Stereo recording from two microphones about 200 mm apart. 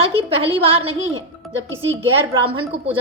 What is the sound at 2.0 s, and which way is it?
Speech, 30° right (ahead or behind).